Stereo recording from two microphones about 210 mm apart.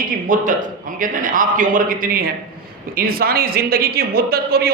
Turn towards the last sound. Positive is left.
turn(degrees=-45)  # may be behind; listen again after turning